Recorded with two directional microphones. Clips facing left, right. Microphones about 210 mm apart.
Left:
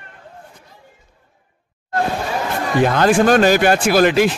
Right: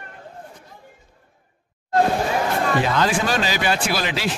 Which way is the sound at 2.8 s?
55° left (ahead or behind).